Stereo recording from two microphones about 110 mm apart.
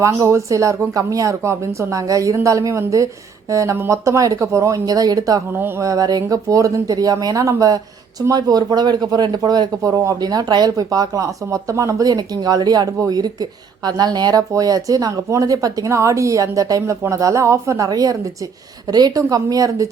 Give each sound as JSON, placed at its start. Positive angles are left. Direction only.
{"t": 0.0, "sound": "speech", "side_deg": -30}
{"t": 5.5, "sound": "speech", "side_deg": -20}